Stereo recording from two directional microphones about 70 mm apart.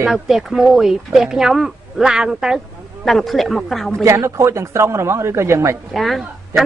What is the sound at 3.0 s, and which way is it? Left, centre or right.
A woman's voice, centre.